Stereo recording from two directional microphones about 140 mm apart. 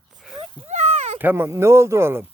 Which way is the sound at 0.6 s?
50° right (ahead or behind).